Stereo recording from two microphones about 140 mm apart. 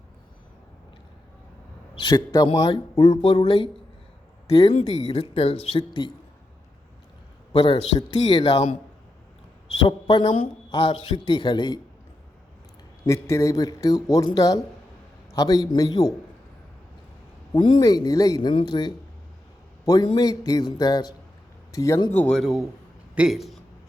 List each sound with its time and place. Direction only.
2.0 s speech: 30° left (ahead or behind)
5.0 s speech: 45° left (ahead or behind)
7.5 s speech: 35° left (ahead or behind)
9.8 s speech: 35° left (ahead or behind)
13.2 s speech: 20° left (ahead or behind)
17.5 s speech: 35° left (ahead or behind)
22.2 s a man's voice: 5° left (ahead or behind)